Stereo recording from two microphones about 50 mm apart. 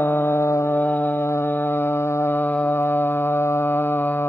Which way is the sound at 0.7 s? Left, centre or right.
Left.